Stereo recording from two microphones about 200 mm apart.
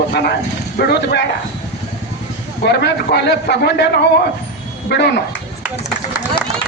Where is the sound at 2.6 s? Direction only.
55° left (ahead or behind).